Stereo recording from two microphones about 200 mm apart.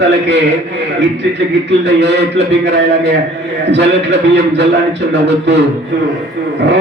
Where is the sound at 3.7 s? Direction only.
60° right (ahead or behind).